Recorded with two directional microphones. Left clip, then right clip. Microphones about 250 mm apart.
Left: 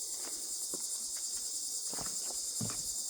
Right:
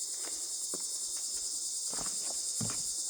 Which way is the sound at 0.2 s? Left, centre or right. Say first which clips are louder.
Right 2 dB; centre.